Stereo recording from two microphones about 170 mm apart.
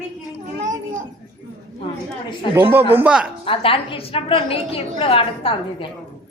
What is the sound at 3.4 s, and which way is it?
A woman's voice, 30° left (ahead or behind).